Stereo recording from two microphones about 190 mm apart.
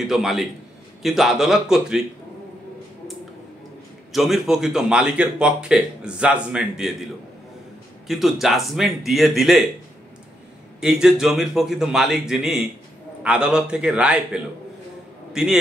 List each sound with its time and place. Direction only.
0.0 s a man's voice: centre (ahead or behind)
4.1 s a man's voice: centre (ahead or behind)
8.1 s a man's voice: centre (ahead or behind)
10.8 s a man's voice: 5° right (ahead or behind)